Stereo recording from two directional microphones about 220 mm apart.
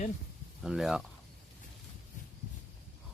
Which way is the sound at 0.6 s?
Centre (ahead or behind).